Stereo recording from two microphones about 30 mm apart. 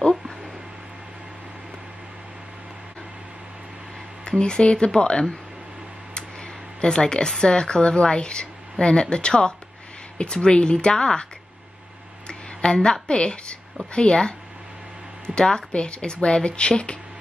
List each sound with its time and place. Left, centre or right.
4.2 s speech: left
6.8 s speech: left
12.8 s speech: left